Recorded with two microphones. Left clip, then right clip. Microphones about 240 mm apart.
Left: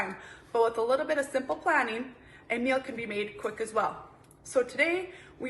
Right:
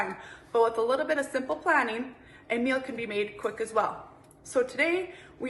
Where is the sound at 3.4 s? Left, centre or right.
Centre.